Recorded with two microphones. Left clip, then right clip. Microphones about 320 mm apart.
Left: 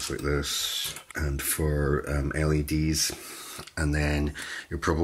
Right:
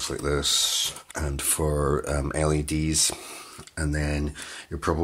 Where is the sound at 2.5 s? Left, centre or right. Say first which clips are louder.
Right 2 dB; centre.